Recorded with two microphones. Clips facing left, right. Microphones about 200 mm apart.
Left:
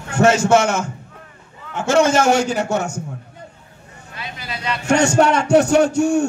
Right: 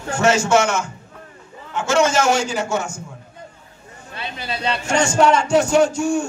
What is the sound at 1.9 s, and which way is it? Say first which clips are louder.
A man's voice: left 3 dB; 55° left (ahead or behind).